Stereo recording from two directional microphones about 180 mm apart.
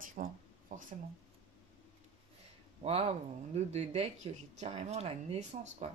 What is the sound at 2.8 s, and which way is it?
Speech, 35° right (ahead or behind).